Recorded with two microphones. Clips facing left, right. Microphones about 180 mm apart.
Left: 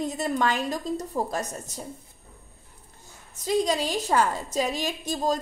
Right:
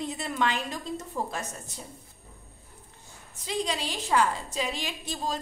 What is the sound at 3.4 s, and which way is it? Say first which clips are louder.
A woman's voice: left 7 dB; 40° left (ahead or behind).